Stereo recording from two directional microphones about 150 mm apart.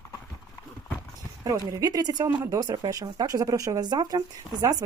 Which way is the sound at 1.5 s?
20° right (ahead or behind).